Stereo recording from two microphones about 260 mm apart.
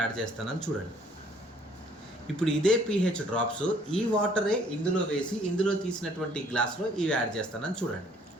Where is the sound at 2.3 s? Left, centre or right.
Centre.